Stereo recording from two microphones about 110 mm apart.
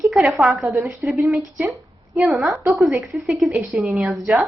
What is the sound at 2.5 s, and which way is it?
Speech, 25° right (ahead or behind).